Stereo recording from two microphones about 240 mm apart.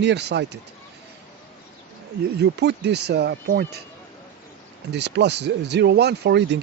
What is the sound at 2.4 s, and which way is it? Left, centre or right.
Speech, right.